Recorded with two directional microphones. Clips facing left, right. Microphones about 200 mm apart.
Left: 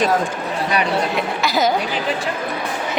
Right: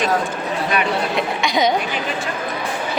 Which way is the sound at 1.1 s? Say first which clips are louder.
Even; 5° left (ahead or behind).